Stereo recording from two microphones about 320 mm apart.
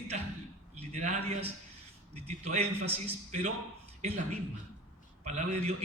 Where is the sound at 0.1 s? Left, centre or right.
Right.